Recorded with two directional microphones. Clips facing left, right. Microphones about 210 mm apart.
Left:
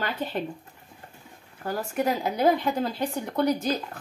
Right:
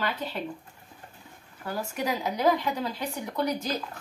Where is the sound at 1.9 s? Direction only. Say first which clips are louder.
Left 4 dB; 55° left (ahead or behind).